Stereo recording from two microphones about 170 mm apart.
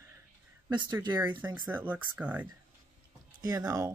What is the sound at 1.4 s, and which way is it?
Speech, 10° right (ahead or behind).